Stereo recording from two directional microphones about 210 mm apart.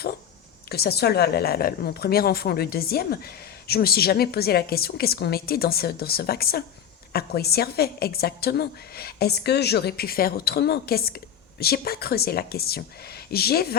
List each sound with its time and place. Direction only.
0.7 s a woman's voice: 50° left (ahead or behind)